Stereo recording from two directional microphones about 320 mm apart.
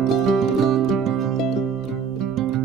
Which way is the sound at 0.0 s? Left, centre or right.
Centre.